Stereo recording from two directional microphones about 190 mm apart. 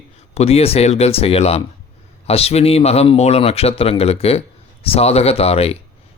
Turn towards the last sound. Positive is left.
turn(degrees=30)  # may be behind; listen again after turning